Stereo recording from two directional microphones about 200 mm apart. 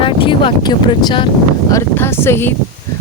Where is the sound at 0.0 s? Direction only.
25° left (ahead or behind).